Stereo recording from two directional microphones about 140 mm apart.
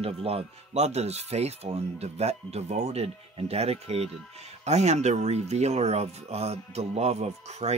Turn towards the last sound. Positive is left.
turn(degrees=-50)  # may be behind; listen again after turning